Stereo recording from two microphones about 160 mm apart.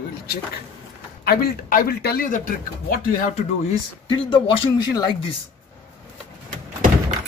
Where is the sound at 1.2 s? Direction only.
70° left (ahead or behind).